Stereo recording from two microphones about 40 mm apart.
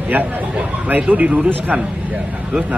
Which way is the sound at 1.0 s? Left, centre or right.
Right.